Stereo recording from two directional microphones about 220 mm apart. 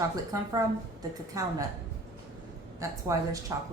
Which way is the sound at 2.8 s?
15° right (ahead or behind).